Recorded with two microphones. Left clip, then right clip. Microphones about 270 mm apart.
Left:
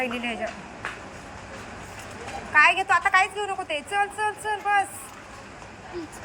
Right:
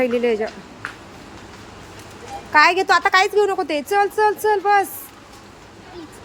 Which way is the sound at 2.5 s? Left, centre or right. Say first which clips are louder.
Right 5 dB; right.